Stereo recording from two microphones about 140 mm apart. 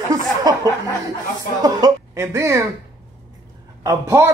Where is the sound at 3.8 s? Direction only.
20° right (ahead or behind).